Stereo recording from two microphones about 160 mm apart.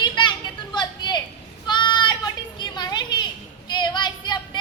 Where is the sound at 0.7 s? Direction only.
30° left (ahead or behind).